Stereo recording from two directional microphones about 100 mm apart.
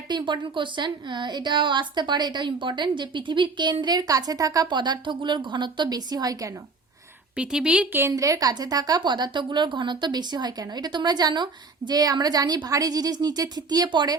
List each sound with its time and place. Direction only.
0.1 s a woman's voice: 55° right (ahead or behind)
7.3 s speech: 10° right (ahead or behind)
8.1 s a woman's voice: 35° right (ahead or behind)